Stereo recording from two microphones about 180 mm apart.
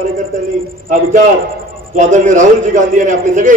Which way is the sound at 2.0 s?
40° right (ahead or behind).